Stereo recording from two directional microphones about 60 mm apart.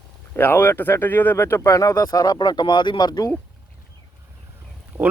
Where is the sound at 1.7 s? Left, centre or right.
Left.